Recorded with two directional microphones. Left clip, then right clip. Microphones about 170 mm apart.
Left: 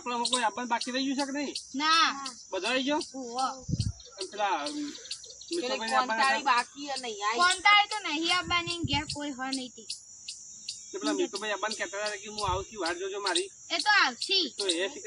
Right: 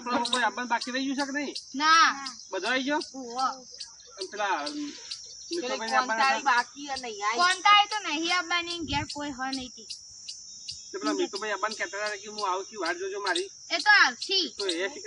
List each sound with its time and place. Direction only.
0.2 s a man's voice: 5° left (ahead or behind)
1.7 s speech: 5° right (ahead or behind)
2.5 s a man's voice: 10° left (ahead or behind)
4.2 s a man's voice: 10° left (ahead or behind)
11.2 s speech: 5° left (ahead or behind)
11.4 s a man's voice: 15° left (ahead or behind)
13.7 s speech: centre (ahead or behind)
14.6 s a man's voice: 15° left (ahead or behind)